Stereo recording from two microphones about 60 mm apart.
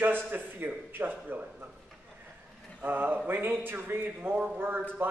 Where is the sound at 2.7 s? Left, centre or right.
Right.